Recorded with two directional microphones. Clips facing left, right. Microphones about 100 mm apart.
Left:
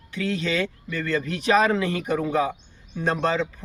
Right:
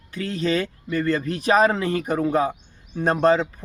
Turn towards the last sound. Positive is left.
turn(degrees=-40)  # may be behind; listen again after turning